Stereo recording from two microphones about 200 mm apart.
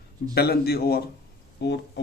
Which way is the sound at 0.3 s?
50° left (ahead or behind).